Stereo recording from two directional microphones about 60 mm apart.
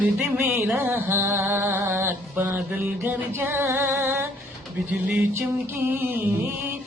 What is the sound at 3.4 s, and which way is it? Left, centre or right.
Mantra, right.